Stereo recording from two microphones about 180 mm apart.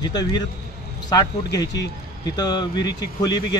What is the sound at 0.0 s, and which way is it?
A man's voice, 25° left (ahead or behind).